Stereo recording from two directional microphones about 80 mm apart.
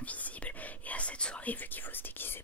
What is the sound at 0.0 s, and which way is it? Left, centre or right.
Whispering, centre.